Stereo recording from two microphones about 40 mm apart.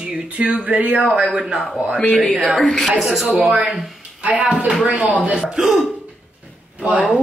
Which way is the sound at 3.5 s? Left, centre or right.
Right.